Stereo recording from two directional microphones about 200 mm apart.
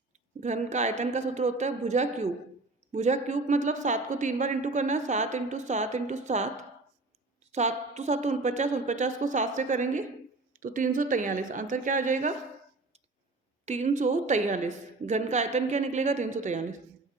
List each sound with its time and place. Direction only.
0.3 s speech: 35° right (ahead or behind)
13.7 s speech: 35° right (ahead or behind)